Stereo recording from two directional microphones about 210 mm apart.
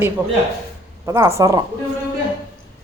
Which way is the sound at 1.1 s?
15° right (ahead or behind).